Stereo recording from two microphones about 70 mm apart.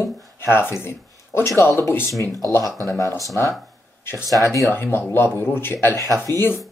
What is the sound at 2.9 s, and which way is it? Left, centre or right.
Speech, left.